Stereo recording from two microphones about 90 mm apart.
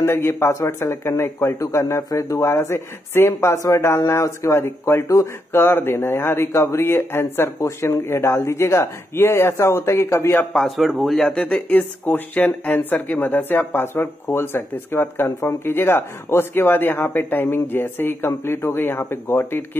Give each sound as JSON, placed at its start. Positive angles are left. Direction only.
{"t": 0.0, "sound": "speech", "side_deg": 25}
{"t": 10.5, "sound": "speech", "side_deg": 0}
{"t": 11.4, "sound": "speech", "side_deg": 15}